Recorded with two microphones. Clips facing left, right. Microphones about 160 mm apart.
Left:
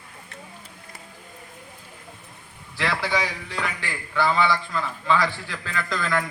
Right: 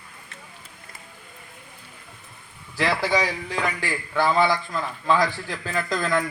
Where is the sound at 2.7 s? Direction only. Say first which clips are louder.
Right 3 dB; 40° right (ahead or behind).